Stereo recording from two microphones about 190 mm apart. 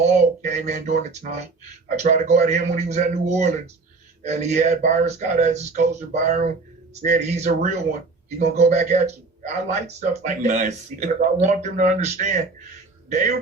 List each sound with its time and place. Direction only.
0.0 s a man's voice: 40° right (ahead or behind)